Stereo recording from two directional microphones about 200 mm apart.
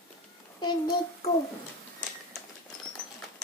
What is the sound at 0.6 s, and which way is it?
Speech, 20° left (ahead or behind).